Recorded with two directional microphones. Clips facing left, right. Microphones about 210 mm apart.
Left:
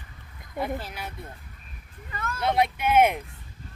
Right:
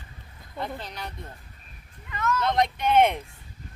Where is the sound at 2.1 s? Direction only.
30° left (ahead or behind).